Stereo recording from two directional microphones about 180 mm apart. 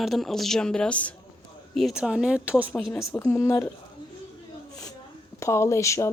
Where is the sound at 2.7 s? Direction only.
10° left (ahead or behind).